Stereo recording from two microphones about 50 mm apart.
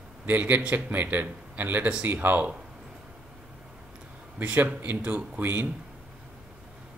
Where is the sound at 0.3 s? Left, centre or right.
Right.